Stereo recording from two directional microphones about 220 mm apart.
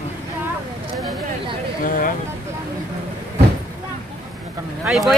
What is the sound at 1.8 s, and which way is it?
Speech, 40° left (ahead or behind).